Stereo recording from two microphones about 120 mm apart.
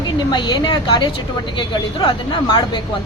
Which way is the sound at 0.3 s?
40° left (ahead or behind).